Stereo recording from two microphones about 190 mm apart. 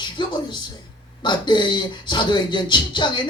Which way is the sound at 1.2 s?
25° left (ahead or behind).